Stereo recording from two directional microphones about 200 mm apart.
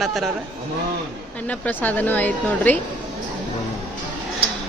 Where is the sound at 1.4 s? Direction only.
5° left (ahead or behind).